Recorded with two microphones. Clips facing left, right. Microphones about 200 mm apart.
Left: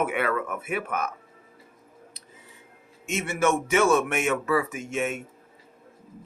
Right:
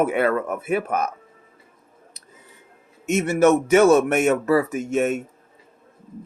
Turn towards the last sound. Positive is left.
turn(degrees=-40)  # may be behind; listen again after turning